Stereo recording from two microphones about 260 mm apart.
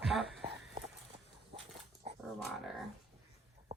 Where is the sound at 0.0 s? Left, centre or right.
Centre.